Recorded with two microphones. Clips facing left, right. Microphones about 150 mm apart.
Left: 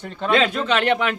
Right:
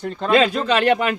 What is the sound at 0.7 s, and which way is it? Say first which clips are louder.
Speech: right 2 dB; 10° right (ahead or behind).